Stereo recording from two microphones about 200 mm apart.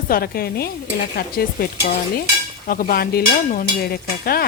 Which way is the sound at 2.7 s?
45° left (ahead or behind).